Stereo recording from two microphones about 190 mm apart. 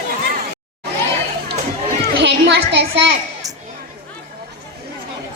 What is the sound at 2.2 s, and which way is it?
Music, 60° right (ahead or behind).